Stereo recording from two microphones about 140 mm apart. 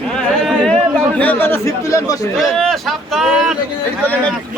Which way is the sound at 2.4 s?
Centre (ahead or behind).